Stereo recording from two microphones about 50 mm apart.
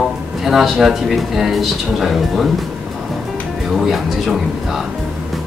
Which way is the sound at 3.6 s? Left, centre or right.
Centre.